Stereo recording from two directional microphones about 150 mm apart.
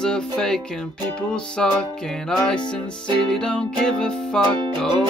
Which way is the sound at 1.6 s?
5° left (ahead or behind).